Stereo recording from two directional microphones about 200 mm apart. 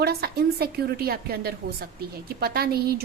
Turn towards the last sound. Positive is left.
turn(degrees=-50)  # may be behind; listen again after turning